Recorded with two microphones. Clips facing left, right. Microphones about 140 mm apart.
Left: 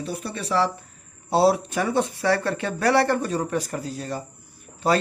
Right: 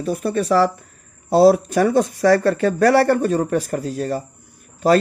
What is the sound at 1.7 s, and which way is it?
Speech, 40° right (ahead or behind).